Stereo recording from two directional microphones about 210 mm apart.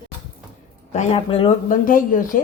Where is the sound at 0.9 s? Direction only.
30° left (ahead or behind).